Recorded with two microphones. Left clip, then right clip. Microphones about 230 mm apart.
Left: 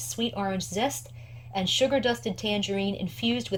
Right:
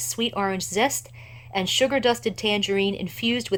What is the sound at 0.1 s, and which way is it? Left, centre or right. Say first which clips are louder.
Speech: right 4 dB; centre.